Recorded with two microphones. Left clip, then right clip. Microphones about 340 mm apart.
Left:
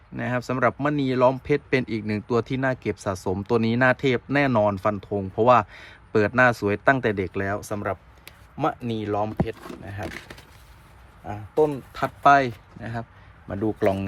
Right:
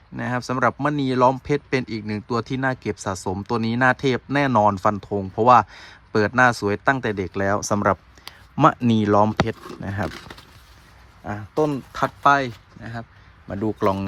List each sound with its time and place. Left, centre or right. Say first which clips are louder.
0.2 s speech: right 1 dB; centre
11.3 s speech: even; right